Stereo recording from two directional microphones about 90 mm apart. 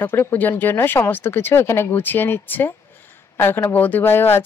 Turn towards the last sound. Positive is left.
turn(degrees=25)  # may be behind; listen again after turning